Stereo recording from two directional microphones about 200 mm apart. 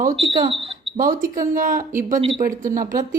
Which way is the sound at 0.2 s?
25° right (ahead or behind).